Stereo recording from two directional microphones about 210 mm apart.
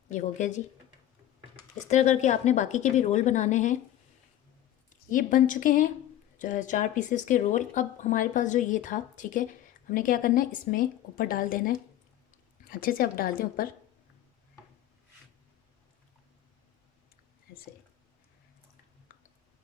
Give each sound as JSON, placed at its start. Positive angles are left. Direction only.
{"t": 0.1, "sound": "speech", "side_deg": 35}
{"t": 1.9, "sound": "speech", "side_deg": 35}
{"t": 5.0, "sound": "a woman's voice", "side_deg": 40}